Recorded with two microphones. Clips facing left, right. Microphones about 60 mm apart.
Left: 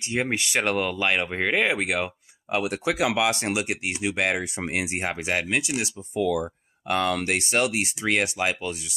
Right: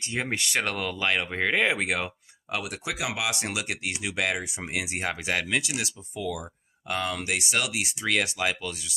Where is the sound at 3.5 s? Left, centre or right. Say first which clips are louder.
Left 5 dB; left.